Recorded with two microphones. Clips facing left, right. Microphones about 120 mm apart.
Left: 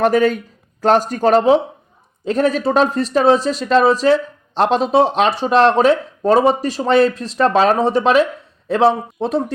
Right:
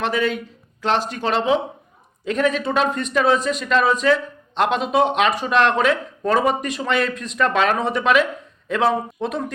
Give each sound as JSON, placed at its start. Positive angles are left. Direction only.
{"t": 0.0, "sound": "speech", "side_deg": 45}